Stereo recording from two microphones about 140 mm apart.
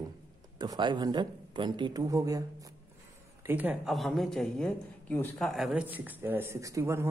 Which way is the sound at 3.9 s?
Centre (ahead or behind).